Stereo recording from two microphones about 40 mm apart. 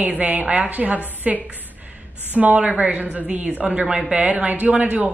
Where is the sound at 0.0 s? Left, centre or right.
Right.